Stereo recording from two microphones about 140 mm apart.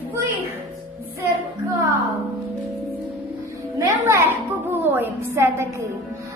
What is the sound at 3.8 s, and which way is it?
A woman's voice, 20° right (ahead or behind).